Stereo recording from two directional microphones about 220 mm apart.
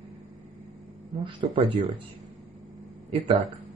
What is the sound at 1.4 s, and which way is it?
Speech, 30° right (ahead or behind).